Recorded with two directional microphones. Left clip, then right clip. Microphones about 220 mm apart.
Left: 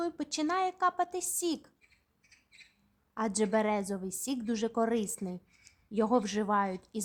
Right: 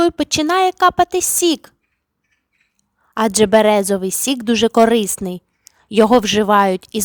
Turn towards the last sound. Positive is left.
turn(degrees=-40)  # may be behind; listen again after turning